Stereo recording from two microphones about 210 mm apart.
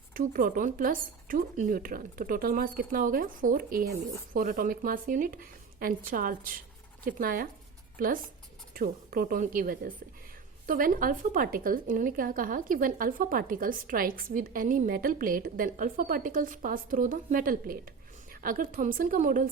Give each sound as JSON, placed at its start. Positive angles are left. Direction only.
{"t": 0.1, "sound": "a woman's voice", "side_deg": -40}